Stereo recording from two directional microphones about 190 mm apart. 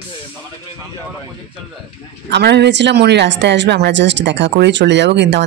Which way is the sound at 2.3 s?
65° right (ahead or behind).